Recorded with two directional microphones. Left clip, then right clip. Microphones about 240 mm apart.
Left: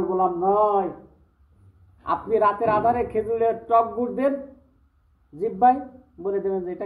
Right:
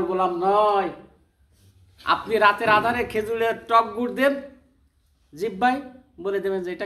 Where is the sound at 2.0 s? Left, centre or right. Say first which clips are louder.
Right 2 dB; centre.